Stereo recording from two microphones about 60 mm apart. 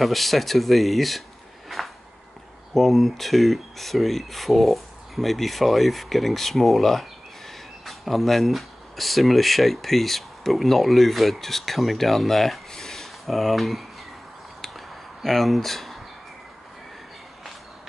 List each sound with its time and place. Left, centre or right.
0.0 s speech: centre
1.7 s a sound: centre
2.7 s speech: centre
15.2 s speech: centre